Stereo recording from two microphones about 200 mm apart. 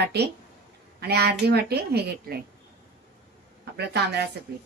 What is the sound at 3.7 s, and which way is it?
Speech, 55° right (ahead or behind).